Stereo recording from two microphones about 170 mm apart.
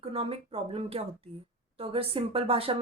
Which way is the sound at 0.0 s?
35° right (ahead or behind).